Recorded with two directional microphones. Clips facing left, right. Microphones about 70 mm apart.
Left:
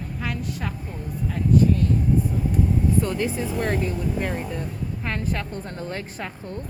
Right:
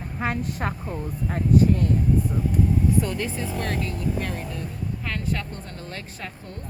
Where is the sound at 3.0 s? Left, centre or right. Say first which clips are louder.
Left 3 dB; centre; by 6.3 s left.